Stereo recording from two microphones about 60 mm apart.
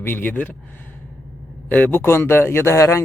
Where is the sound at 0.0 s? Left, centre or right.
Left.